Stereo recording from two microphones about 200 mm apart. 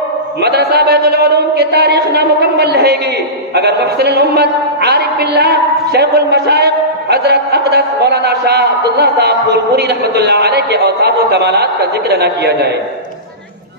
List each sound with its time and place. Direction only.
0.4 s a man's voice: 55° right (ahead or behind)